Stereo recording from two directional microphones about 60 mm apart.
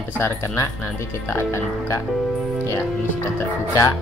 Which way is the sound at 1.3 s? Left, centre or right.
Left.